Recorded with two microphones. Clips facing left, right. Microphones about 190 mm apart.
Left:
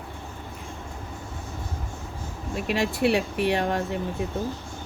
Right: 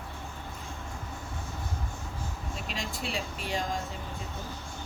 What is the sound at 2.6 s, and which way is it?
Speech, 65° left (ahead or behind).